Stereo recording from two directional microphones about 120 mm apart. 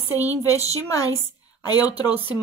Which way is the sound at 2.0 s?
15° right (ahead or behind).